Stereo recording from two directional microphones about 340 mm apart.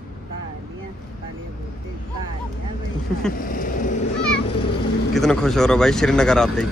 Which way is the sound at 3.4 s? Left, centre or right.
Left.